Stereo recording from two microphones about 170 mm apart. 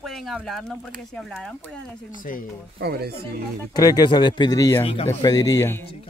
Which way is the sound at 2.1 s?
50° left (ahead or behind).